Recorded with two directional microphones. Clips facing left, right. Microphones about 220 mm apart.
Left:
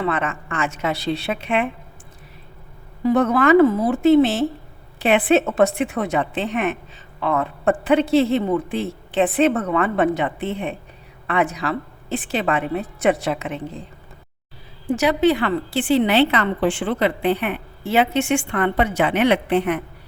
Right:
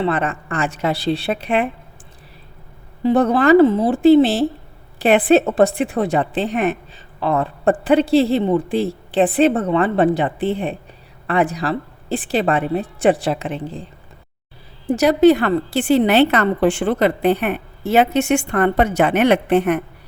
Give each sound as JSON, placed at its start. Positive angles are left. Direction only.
{"t": 0.0, "sound": "a woman's voice", "side_deg": -35}
{"t": 3.0, "sound": "a woman's voice", "side_deg": -30}
{"t": 14.8, "sound": "a woman's voice", "side_deg": -40}